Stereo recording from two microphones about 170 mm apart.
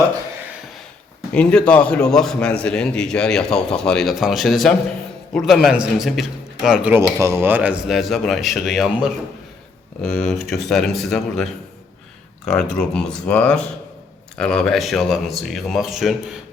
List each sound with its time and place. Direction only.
1.3 s a man's voice: 5° left (ahead or behind)